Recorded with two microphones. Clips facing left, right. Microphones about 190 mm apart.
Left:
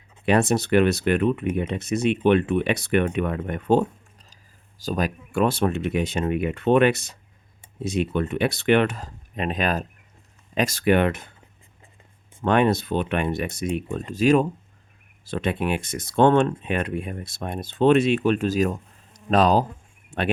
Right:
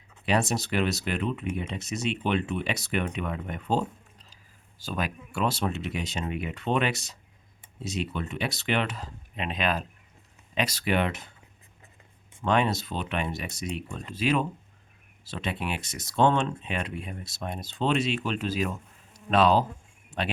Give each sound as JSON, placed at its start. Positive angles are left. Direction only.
{"t": 0.3, "sound": "speech", "side_deg": 55}
{"t": 12.4, "sound": "speech", "side_deg": 55}